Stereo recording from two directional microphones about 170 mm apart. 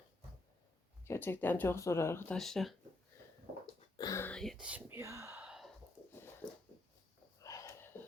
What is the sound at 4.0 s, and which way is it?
Whispering, 20° left (ahead or behind).